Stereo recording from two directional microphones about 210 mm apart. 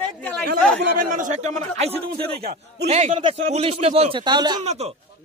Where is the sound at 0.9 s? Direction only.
40° right (ahead or behind).